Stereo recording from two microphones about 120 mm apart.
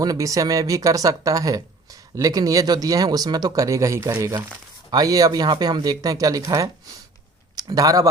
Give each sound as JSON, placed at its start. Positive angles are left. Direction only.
{"t": 0.0, "sound": "speech", "side_deg": -30}